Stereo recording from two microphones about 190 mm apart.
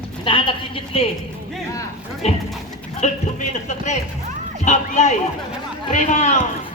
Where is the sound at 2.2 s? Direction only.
35° left (ahead or behind).